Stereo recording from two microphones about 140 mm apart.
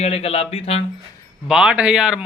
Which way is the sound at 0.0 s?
45° left (ahead or behind).